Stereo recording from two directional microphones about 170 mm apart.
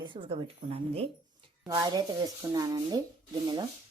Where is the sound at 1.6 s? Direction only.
20° right (ahead or behind).